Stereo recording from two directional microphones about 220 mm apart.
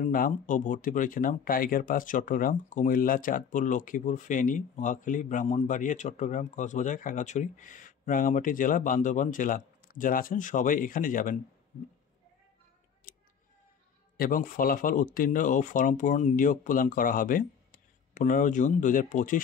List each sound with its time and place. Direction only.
0.0 s speech: 40° left (ahead or behind)
13.1 s a sound: 40° left (ahead or behind)
14.1 s speech: 40° left (ahead or behind)